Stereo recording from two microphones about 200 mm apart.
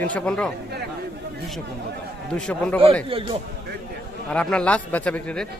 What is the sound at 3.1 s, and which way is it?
Speech, 30° right (ahead or behind).